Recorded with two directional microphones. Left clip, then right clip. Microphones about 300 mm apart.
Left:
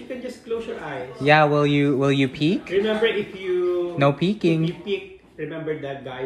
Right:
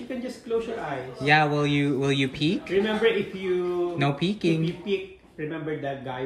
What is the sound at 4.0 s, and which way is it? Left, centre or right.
Speech, centre.